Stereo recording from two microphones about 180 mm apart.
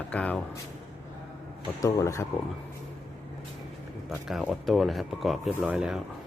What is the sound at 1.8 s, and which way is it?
Speech, 15° left (ahead or behind).